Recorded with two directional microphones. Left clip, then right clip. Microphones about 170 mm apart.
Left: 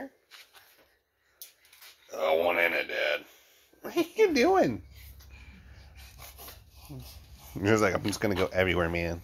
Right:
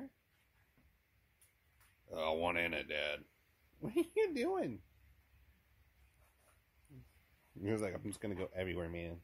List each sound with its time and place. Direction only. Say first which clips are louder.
2.0 s speech: left 11 dB; 15° right (ahead or behind)
7.6 s speech: left 15 dB; 15° right (ahead or behind)